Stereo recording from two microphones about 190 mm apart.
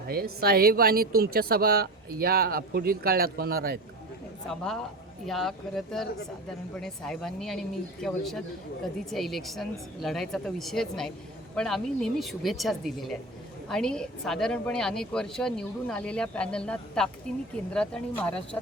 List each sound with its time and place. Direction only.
0.3 s a woman's voice: 55° right (ahead or behind)
4.4 s speech: 5° left (ahead or behind)